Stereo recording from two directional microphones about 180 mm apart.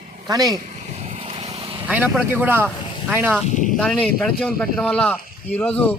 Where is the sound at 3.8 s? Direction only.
5° left (ahead or behind).